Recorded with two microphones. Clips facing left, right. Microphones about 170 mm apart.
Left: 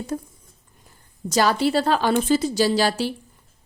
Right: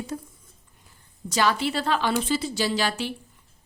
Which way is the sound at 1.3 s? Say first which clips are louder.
Left 5 dB; 40° left (ahead or behind).